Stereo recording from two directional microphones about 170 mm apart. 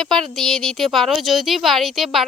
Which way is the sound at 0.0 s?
5° left (ahead or behind).